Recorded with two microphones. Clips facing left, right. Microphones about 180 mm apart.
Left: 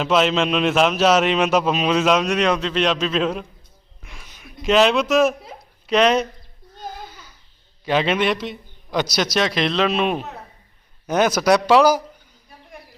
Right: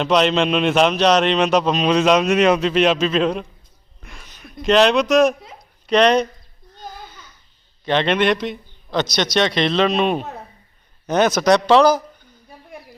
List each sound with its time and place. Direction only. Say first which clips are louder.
0.0 s a man's voice: right 2 dB; 5° left (ahead or behind)
4.0 s a sound: right 2 dB; 5° left (ahead or behind)
5.9 s a man's voice: right 2 dB; 5° left (ahead or behind)
7.9 s a man's voice: right 2 dB; 5° left (ahead or behind)